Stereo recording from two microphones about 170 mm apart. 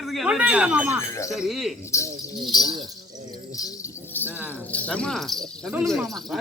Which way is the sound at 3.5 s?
20° left (ahead or behind).